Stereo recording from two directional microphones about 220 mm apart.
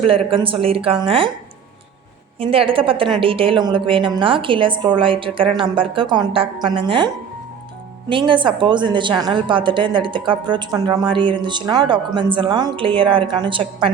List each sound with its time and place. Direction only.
0.0 s a woman's voice: 25° right (ahead or behind)
2.4 s a woman's voice: 25° right (ahead or behind)
8.1 s a woman's voice: 20° right (ahead or behind)